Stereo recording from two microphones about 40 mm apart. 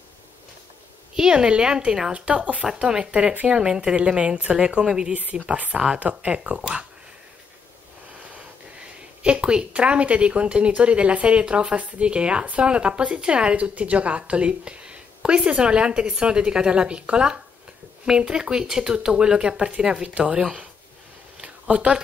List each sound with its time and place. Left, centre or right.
1.1 s a woman's voice: right
5.1 s a woman's voice: right
9.2 s a woman's voice: right
21.4 s a sound: right